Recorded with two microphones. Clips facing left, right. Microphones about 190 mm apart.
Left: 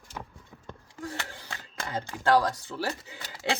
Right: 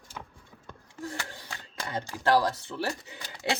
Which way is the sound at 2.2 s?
25° right (ahead or behind).